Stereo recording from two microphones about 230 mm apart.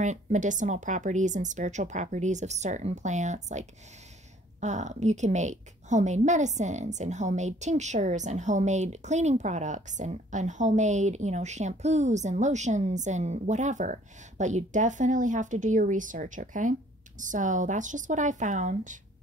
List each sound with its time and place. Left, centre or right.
0.0 s a woman's voice: right